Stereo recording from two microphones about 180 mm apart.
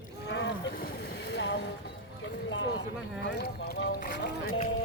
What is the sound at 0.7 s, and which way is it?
Boat, 60° left (ahead or behind).